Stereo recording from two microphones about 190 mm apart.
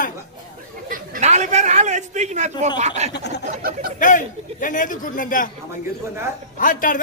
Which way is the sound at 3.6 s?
50° right (ahead or behind).